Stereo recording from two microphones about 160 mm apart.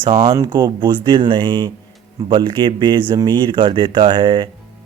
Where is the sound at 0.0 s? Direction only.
35° right (ahead or behind).